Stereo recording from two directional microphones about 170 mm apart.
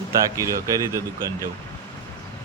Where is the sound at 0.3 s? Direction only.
20° right (ahead or behind).